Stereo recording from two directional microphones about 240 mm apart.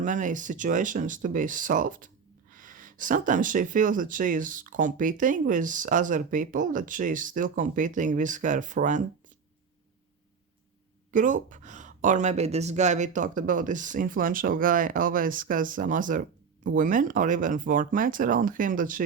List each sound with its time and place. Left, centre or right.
0.0 s speech: right
11.1 s speech: right